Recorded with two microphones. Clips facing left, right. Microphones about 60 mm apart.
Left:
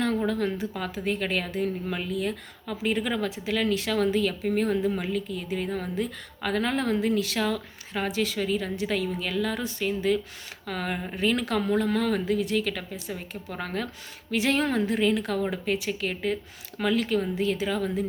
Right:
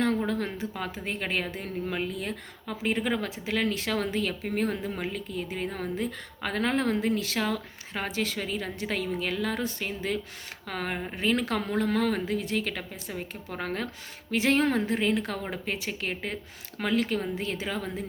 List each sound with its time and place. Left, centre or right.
0.3 s speech: right